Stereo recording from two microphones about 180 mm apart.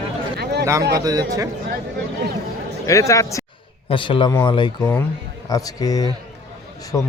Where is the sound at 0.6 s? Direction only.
15° right (ahead or behind).